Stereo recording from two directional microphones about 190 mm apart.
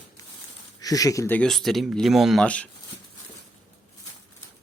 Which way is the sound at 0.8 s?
20° left (ahead or behind).